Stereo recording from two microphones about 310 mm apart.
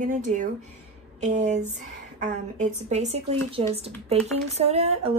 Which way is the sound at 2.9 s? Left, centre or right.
Right.